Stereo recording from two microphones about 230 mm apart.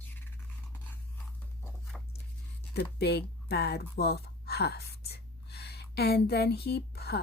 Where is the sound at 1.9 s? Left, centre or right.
Centre.